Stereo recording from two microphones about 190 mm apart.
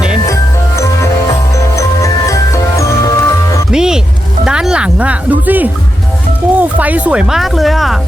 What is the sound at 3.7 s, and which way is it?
Music, 5° right (ahead or behind).